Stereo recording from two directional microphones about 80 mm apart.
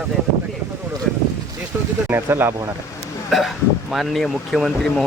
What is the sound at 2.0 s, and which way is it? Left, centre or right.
Speech, right.